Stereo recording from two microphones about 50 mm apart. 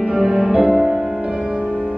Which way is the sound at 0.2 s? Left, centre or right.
Centre.